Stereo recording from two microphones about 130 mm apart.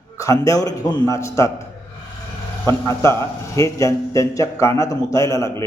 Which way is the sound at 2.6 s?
20° left (ahead or behind).